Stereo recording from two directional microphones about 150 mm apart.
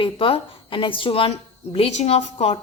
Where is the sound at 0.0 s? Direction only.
35° left (ahead or behind).